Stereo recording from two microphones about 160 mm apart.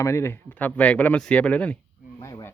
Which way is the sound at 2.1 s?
20° left (ahead or behind).